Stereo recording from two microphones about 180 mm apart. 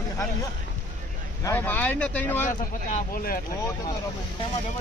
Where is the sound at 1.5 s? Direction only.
10° left (ahead or behind).